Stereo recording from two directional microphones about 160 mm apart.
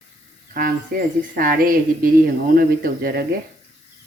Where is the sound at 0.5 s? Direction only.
60° right (ahead or behind).